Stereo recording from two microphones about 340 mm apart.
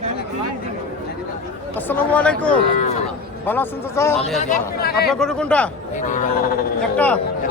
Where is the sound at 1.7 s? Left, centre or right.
Centre.